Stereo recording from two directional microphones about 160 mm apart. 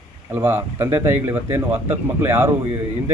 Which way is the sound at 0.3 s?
15° right (ahead or behind).